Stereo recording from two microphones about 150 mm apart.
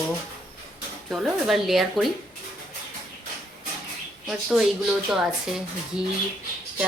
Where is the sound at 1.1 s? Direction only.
Centre (ahead or behind).